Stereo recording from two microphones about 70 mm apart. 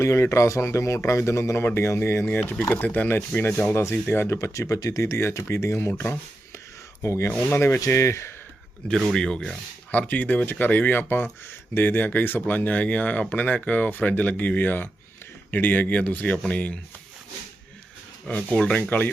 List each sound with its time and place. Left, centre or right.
0.0 s speech: left
3.1 s speech: left
9.0 s speech: centre
9.9 s speech: left
18.5 s speech: centre